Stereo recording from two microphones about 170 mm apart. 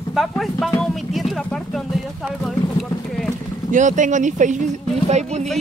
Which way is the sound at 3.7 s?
50° right (ahead or behind).